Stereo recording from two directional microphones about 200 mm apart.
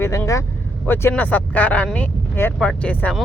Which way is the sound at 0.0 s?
15° left (ahead or behind).